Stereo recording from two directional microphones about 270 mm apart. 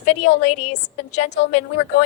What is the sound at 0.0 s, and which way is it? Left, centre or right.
A woman's voice, left.